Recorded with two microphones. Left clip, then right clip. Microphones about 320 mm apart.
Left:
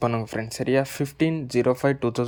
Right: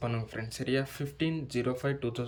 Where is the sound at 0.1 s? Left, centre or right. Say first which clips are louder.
Left 10 dB; centre.